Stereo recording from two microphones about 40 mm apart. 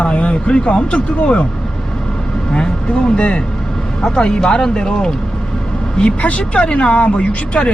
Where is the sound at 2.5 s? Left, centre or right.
Left.